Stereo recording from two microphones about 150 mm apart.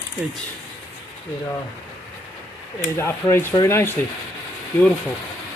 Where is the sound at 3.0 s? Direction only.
15° left (ahead or behind).